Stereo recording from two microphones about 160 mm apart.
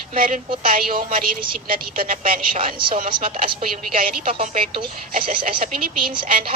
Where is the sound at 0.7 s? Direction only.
60° right (ahead or behind).